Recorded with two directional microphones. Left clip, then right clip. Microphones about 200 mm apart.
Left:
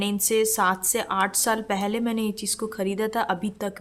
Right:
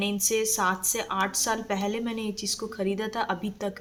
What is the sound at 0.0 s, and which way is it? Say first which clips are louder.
Speech: left 3 dB; 30° left (ahead or behind).